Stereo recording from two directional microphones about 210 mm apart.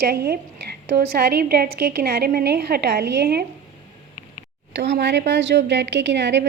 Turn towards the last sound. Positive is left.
turn(degrees=-55)  # may be behind; listen again after turning